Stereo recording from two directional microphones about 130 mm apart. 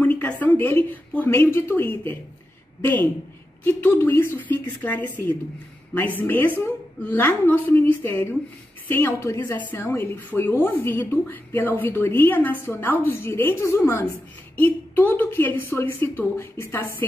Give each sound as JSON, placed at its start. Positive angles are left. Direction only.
{"t": 0.0, "sound": "a woman's voice", "side_deg": 10}